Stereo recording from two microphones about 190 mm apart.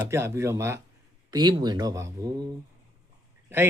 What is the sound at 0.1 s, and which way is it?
Speech, 15° right (ahead or behind).